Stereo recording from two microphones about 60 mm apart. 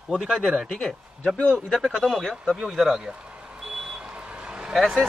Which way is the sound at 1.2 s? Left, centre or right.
Left.